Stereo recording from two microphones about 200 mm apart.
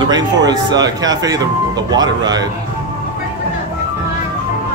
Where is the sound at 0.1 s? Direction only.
20° right (ahead or behind).